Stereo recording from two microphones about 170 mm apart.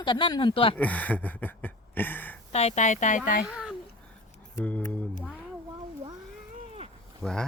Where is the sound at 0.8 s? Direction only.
10° left (ahead or behind).